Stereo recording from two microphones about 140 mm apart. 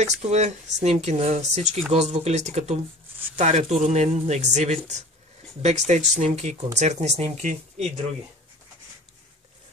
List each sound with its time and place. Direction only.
0.0 s speech: 55° right (ahead or behind)